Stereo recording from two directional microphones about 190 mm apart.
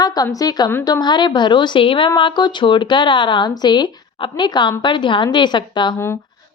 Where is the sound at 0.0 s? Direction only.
20° left (ahead or behind).